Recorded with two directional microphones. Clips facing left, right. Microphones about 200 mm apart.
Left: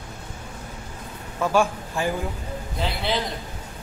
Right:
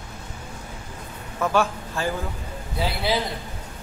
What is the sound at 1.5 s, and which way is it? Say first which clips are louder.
Speech: left 2 dB; 15° left (ahead or behind).